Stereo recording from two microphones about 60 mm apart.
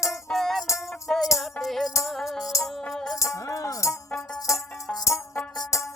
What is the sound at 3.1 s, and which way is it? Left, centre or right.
Music, left.